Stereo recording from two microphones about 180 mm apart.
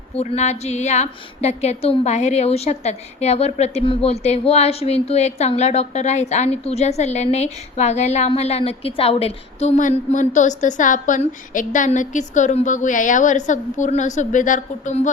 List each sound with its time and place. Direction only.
0.2 s a woman's voice: 35° left (ahead or behind)